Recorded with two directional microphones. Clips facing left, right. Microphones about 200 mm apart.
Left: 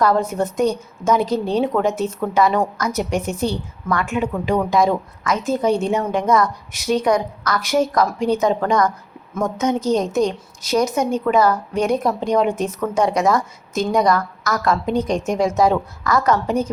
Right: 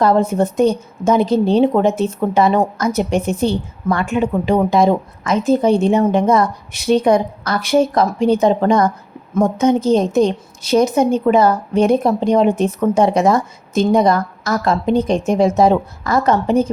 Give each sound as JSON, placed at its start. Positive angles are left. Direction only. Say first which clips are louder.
{"t": 0.0, "sound": "a woman's voice", "louder": "right 4 dB", "side_deg": -25}